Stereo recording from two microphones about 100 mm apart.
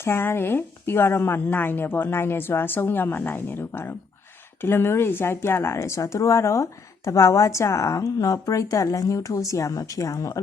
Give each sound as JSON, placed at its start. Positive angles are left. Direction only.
{"t": 0.0, "sound": "a woman's voice", "side_deg": 25}